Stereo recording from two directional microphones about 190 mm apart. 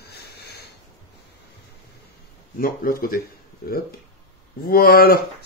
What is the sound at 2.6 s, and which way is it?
Speech, 50° left (ahead or behind).